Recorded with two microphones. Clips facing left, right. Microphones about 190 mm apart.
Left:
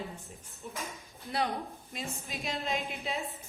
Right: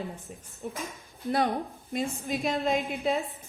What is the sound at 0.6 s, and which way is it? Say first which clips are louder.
Speech: right 6 dB; 50° right (ahead or behind).